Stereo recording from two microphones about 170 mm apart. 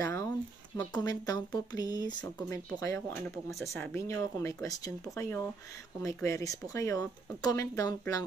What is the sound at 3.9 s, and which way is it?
Speech, 20° left (ahead or behind).